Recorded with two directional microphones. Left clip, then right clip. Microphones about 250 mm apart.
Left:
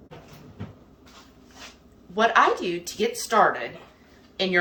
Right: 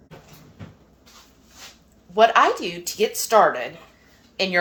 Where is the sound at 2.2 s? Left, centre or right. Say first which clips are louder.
Right 3 dB; right.